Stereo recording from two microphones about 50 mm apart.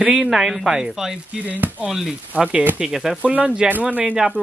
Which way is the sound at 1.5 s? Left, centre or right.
Right.